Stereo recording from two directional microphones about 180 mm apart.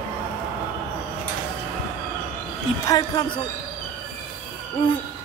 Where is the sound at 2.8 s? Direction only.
20° left (ahead or behind).